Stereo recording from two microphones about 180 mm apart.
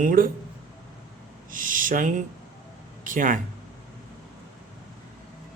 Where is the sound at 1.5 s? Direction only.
50° right (ahead or behind).